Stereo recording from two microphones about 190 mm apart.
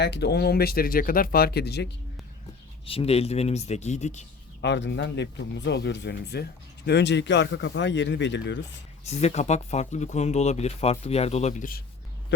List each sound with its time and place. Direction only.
0.0 s speech: 60° left (ahead or behind)
2.8 s speech: 30° left (ahead or behind)
4.6 s speech: 65° left (ahead or behind)
9.0 s speech: 35° left (ahead or behind)